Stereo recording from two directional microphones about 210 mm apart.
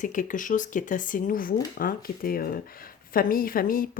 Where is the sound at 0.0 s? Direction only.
40° left (ahead or behind).